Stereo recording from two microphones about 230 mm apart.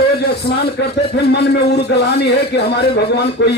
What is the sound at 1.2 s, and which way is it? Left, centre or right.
A man's voice, left.